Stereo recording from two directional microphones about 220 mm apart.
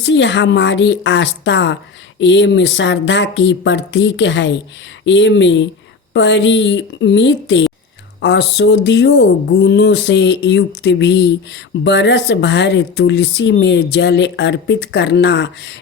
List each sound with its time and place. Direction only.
0.0 s a woman's voice: 55° left (ahead or behind)